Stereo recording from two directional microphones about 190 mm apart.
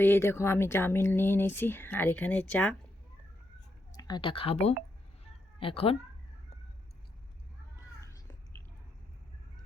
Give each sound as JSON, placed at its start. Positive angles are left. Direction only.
{"t": 0.0, "sound": "speech", "side_deg": 10}
{"t": 3.9, "sound": "speech", "side_deg": 20}
{"t": 5.2, "sound": "cat", "side_deg": 30}
{"t": 8.0, "sound": "a sound", "side_deg": 15}